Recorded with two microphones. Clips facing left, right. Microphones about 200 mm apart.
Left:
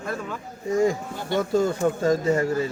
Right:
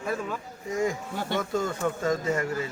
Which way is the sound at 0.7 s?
30° left (ahead or behind).